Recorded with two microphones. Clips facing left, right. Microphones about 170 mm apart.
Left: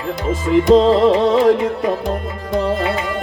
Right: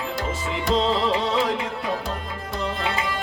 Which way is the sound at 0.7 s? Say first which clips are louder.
Left 10 dB; 45° left (ahead or behind).